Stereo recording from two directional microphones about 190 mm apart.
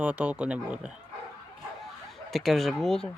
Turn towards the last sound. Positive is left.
turn(degrees=0)  # may be behind; listen again after turning